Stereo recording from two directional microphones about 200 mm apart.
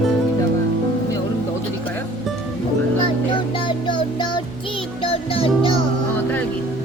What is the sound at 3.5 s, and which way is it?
Music, 25° left (ahead or behind).